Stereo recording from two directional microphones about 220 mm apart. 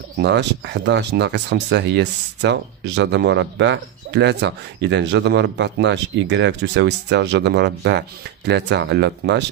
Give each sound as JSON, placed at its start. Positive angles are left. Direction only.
{"t": 0.2, "sound": "speech", "side_deg": -50}